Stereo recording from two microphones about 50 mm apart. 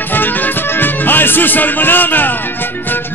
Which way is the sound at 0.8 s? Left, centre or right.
Left.